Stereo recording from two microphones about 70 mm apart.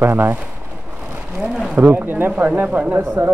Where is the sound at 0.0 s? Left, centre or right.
Right.